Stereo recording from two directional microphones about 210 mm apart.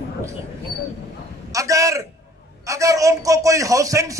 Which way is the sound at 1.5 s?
15° right (ahead or behind).